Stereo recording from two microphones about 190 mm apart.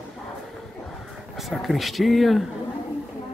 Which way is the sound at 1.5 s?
Centre (ahead or behind).